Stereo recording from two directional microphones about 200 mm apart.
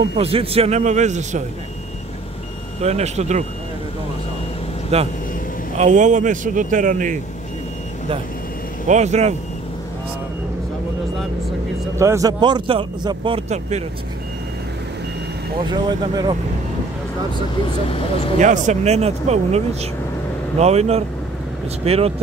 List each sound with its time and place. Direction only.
0.2 s speech: 30° right (ahead or behind)
2.8 s speech: 35° right (ahead or behind)
4.9 s speech: 30° right (ahead or behind)
8.8 s speech: 35° right (ahead or behind)
12.0 s speech: 15° right (ahead or behind); by 13.8 s 35° right (ahead or behind)
15.6 s speech: 20° right (ahead or behind)
17.8 s speech: 30° left (ahead or behind)
18.4 s speech: 35° right (ahead or behind)